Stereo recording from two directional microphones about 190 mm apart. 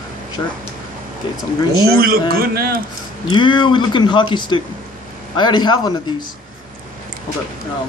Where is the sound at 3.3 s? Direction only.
25° left (ahead or behind).